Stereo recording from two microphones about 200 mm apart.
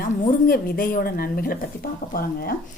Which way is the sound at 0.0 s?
45° left (ahead or behind).